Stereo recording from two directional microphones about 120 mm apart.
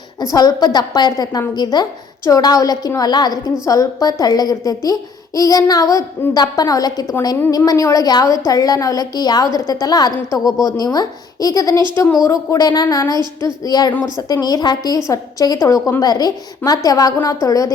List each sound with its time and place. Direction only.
0.2 s a woman's voice: 30° left (ahead or behind)